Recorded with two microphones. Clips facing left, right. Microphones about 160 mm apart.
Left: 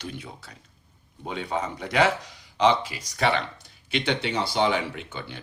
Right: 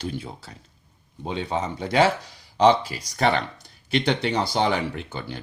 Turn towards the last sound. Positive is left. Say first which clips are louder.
# right 4 dB
turn(degrees=-40)  # may be behind; listen again after turning